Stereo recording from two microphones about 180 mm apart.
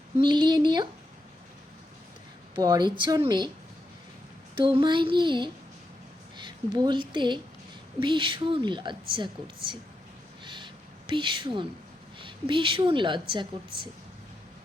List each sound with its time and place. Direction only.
0.2 s a woman's voice: 25° right (ahead or behind)
2.6 s a woman's voice: 20° right (ahead or behind)
4.5 s a woman's voice: 25° right (ahead or behind)
10.4 s a sound: 25° right (ahead or behind)
12.2 s a woman's voice: 30° right (ahead or behind)